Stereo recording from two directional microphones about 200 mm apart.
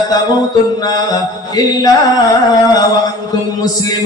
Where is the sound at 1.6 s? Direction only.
20° left (ahead or behind).